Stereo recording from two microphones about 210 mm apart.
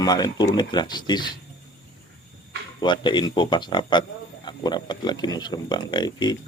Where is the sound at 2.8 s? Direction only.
20° left (ahead or behind).